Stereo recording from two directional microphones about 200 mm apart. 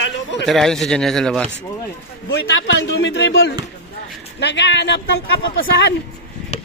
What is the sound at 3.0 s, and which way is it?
A man's voice, 70° left (ahead or behind).